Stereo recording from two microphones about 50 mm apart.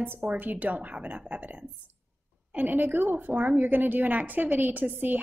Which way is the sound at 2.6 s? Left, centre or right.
Right.